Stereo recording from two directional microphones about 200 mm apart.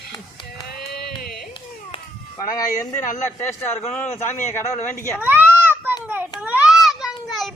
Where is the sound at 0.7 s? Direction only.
50° left (ahead or behind).